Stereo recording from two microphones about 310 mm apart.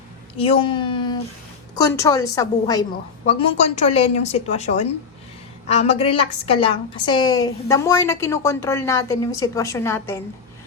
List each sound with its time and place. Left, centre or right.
0.3 s a woman's voice: centre